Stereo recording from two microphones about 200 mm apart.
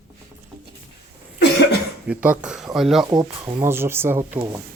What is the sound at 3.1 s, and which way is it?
Speech, 15° right (ahead or behind).